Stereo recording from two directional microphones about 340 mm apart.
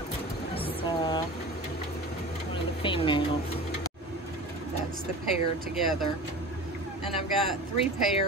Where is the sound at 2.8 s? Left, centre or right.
Centre.